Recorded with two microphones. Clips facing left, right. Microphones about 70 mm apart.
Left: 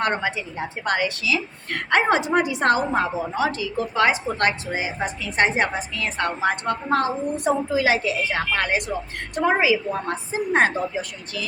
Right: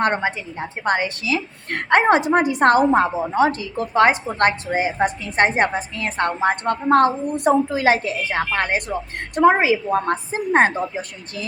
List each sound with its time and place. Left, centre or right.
0.0 s a woman's voice: right
9.3 s a woman's voice: right